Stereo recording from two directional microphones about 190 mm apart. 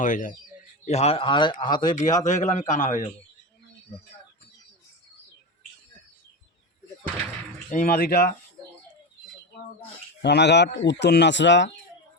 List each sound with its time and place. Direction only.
0.0 s speech: 45° left (ahead or behind)
0.9 s a man's voice: 35° left (ahead or behind)
1.9 s a man's voice: 40° left (ahead or behind)
7.7 s speech: 45° left (ahead or behind)
10.2 s speech: 65° left (ahead or behind)